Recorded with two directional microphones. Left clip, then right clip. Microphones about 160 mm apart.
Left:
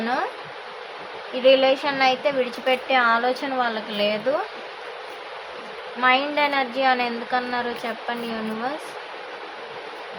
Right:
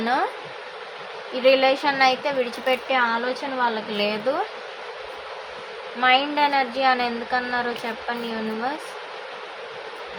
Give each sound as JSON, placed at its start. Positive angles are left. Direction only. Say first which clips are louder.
{"t": 0.0, "sound": "speech", "louder": "right 2 dB", "side_deg": -15}
{"t": 1.5, "sound": "speech", "louder": "left 1 dB", "side_deg": -10}
{"t": 6.0, "sound": "speech", "louder": "right 1 dB", "side_deg": -15}